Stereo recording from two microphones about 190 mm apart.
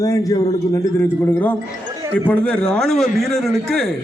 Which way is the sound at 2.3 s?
5° left (ahead or behind).